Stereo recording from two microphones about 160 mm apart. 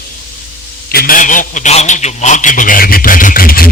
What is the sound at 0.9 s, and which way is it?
A man's voice, 60° left (ahead or behind).